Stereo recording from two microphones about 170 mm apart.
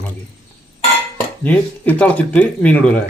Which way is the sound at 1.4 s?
10° left (ahead or behind).